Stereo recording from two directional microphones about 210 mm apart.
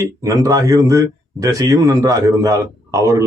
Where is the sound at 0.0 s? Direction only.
15° right (ahead or behind).